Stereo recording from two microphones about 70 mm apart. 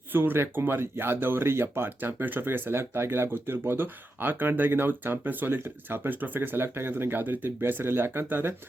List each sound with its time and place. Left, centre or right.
0.1 s speech: right